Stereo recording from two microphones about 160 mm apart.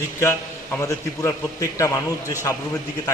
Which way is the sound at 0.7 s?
20° left (ahead or behind).